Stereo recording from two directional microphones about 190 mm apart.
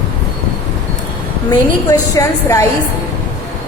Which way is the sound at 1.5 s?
15° left (ahead or behind).